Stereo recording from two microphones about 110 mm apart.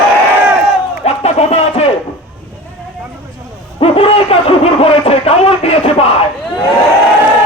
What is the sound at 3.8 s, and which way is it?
Speech, 60° left (ahead or behind).